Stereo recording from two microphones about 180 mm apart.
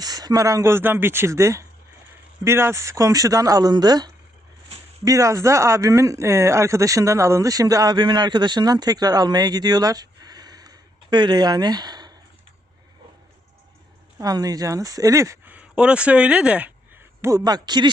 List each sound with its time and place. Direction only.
0.0 s speech: 20° right (ahead or behind)
14.2 s speech: 20° right (ahead or behind)